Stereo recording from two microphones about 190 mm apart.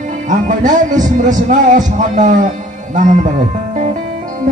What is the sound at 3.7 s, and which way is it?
Music, 40° right (ahead or behind).